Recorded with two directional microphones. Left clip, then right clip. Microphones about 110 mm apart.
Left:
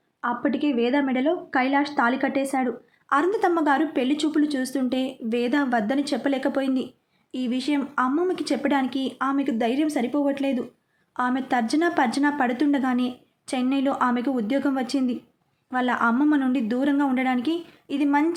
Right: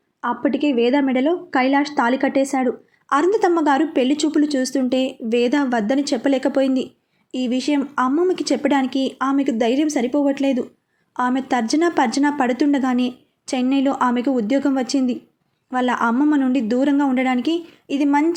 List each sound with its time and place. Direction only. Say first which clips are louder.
0.2 s speech: right 4 dB; 25° right (ahead or behind)
8.1 s speech: right 5 dB; 20° right (ahead or behind)